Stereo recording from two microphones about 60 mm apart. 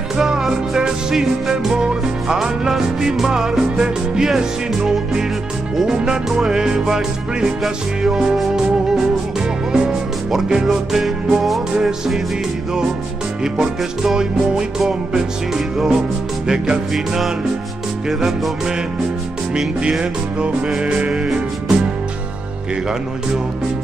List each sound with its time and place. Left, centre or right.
0.2 s music: centre
13.4 s music: centre
19.5 s music: centre